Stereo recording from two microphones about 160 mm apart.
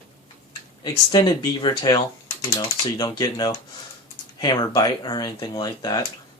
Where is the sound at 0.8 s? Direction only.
25° left (ahead or behind).